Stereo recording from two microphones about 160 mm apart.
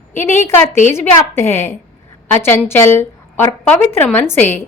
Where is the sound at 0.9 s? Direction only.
15° left (ahead or behind).